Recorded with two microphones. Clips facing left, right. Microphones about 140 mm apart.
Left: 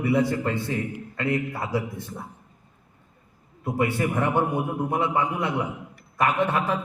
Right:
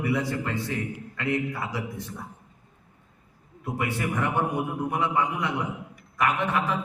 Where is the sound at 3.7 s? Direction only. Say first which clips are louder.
Left 5 dB; 30° left (ahead or behind).